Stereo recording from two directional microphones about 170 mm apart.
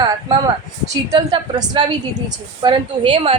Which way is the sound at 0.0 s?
25° right (ahead or behind).